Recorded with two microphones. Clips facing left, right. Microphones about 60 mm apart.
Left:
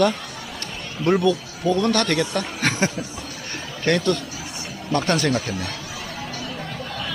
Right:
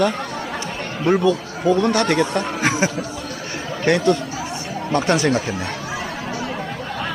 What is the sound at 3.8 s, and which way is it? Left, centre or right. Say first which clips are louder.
Speech: right 4 dB; centre.